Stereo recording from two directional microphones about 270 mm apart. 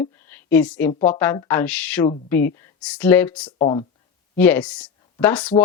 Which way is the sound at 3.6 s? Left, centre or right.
Centre.